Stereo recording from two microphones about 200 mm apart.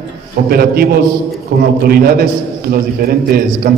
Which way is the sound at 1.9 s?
50° right (ahead or behind).